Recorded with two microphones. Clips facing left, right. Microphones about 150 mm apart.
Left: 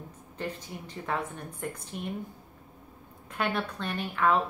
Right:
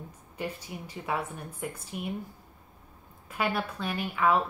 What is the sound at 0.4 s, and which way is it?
A woman's voice, 10° right (ahead or behind).